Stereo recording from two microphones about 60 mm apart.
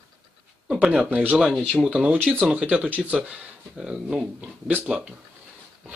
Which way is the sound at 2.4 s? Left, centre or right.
Right.